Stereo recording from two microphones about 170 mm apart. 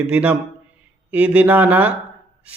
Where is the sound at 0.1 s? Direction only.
10° right (ahead or behind).